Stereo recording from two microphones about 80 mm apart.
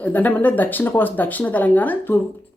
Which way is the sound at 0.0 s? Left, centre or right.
Centre.